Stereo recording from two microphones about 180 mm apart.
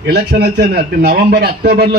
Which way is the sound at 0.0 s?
60° right (ahead or behind).